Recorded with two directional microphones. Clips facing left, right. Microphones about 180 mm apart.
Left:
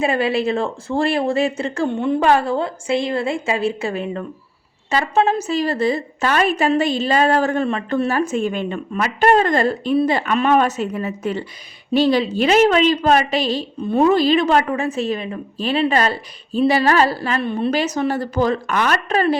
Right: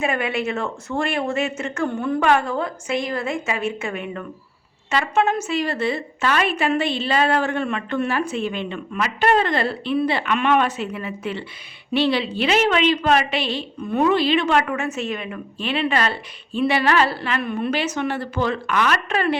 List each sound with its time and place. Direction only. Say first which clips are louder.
0.0 s a woman's voice: left 5 dB; 30° left (ahead or behind)